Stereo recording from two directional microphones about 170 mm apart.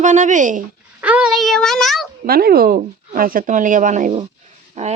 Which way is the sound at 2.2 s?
65° right (ahead or behind).